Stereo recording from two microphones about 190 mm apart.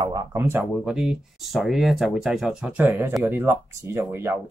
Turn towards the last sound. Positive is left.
turn(degrees=-10)  # may be behind; listen again after turning